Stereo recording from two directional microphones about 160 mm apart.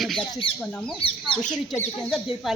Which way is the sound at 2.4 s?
Centre (ahead or behind).